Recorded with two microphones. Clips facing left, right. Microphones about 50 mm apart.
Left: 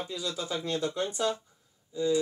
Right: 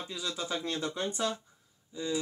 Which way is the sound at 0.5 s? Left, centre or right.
Right.